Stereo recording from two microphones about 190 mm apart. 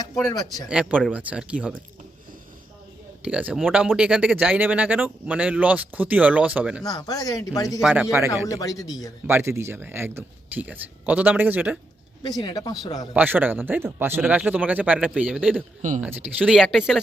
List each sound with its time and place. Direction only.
0.1 s speech: 20° left (ahead or behind)
0.7 s speech: 5° right (ahead or behind)
3.2 s speech: 5° right (ahead or behind)
6.8 s speech: 20° left (ahead or behind)
7.8 s speech: 5° right (ahead or behind)
8.4 s speech: 20° left (ahead or behind)
9.2 s speech: 10° right (ahead or behind)
12.4 s speech: 20° left (ahead or behind)
13.1 s speech: 10° right (ahead or behind)